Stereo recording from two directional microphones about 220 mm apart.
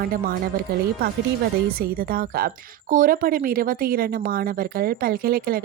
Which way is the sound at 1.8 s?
40° right (ahead or behind).